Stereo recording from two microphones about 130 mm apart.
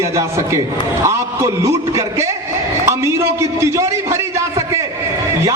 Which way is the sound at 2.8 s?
20° right (ahead or behind).